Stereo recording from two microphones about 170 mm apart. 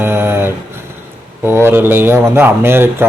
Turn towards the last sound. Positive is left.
turn(degrees=-15)  # may be behind; listen again after turning